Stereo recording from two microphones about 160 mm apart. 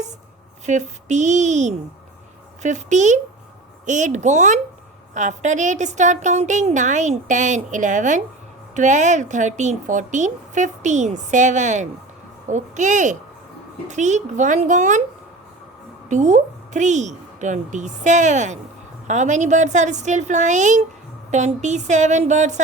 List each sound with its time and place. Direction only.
0.6 s speech: 45° right (ahead or behind)
16.0 s speech: 50° right (ahead or behind)